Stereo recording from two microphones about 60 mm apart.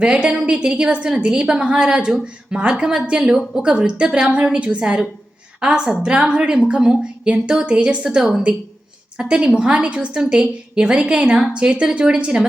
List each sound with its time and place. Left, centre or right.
0.0 s a woman's voice: centre